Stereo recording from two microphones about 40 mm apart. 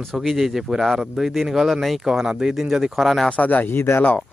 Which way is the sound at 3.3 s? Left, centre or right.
Left.